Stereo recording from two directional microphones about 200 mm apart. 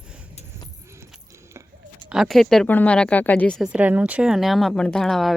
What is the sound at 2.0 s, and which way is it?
Speech, centre (ahead or behind).